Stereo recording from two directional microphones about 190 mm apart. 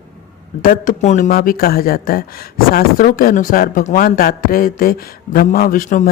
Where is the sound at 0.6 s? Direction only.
45° left (ahead or behind).